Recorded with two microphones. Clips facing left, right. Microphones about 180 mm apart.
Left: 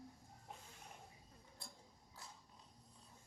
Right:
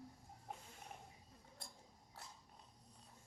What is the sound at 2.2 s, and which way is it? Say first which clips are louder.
Biting: right 1 dB; 70° right (ahead or behind).